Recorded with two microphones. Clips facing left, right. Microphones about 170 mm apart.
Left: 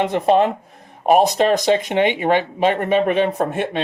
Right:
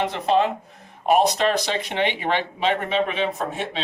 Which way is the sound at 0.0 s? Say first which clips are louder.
Left 5 dB; 50° left (ahead or behind).